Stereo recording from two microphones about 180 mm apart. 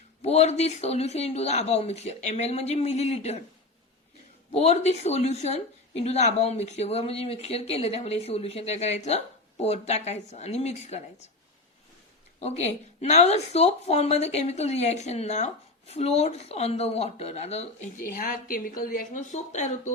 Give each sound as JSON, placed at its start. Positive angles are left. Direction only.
{"t": 0.2, "sound": "speech", "side_deg": 35}
{"t": 4.5, "sound": "speech", "side_deg": 35}
{"t": 12.4, "sound": "speech", "side_deg": 35}